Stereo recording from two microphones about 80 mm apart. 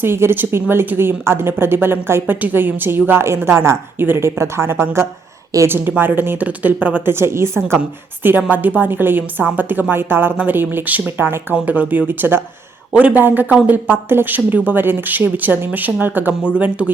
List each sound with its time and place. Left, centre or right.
0.0 s a woman's voice: right
7.8 s a woman's voice: right
12.9 s a woman's voice: centre